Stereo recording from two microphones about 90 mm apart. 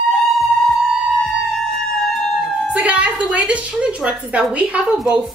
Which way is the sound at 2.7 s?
15° right (ahead or behind).